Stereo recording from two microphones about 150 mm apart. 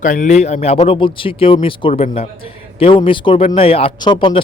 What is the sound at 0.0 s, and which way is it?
Speech, 60° left (ahead or behind).